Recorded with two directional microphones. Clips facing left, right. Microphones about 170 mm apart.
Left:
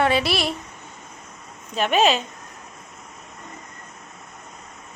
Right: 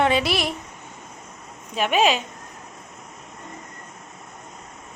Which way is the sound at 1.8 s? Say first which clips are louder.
Left 1 dB; 10° right (ahead or behind).